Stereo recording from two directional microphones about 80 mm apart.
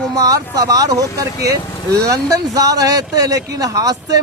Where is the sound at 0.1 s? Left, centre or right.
Right.